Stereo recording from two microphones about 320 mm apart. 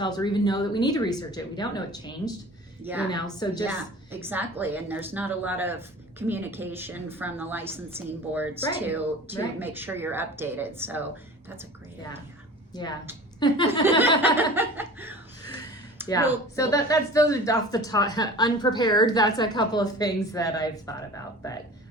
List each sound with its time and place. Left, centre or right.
0.0 s speech: centre
3.7 s a woman's voice: centre
12.7 s speech: centre
14.2 s chuckle: centre
16.0 s a sound: centre
16.6 s speech: centre